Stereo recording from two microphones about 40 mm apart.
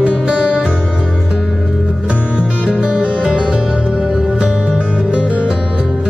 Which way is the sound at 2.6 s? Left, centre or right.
Centre.